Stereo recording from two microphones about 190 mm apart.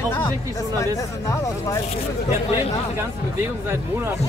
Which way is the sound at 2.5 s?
20° left (ahead or behind).